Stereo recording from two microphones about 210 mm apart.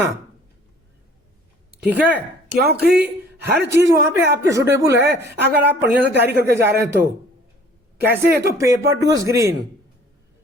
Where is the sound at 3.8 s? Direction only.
15° right (ahead or behind).